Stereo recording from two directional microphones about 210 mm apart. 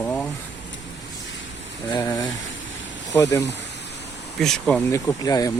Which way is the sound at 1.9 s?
15° left (ahead or behind).